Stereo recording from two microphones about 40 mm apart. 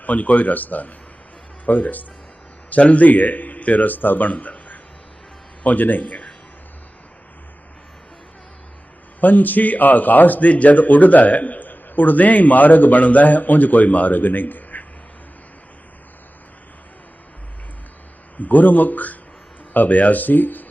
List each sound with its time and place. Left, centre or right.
0.0 s a man's voice: left
9.2 s a man's voice: left
18.3 s a man's voice: left